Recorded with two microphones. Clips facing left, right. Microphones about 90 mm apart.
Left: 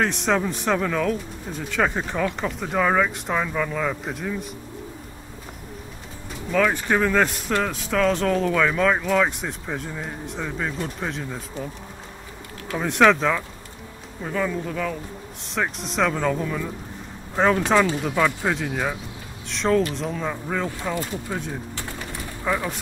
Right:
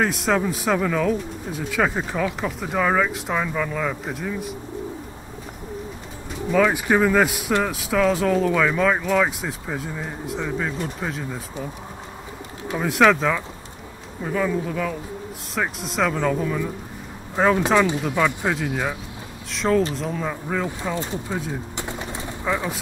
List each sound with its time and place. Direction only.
0.0 s speech: 5° right (ahead or behind)
6.5 s speech: 10° right (ahead or behind)
12.7 s speech: centre (ahead or behind)
18.0 s speech: centre (ahead or behind)
20.9 s speech: 25° right (ahead or behind)
21.7 s bird: 20° right (ahead or behind)